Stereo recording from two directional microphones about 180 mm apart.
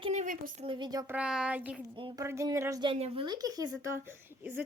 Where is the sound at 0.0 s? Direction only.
40° right (ahead or behind).